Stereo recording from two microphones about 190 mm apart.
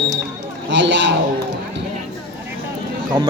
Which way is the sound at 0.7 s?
70° right (ahead or behind).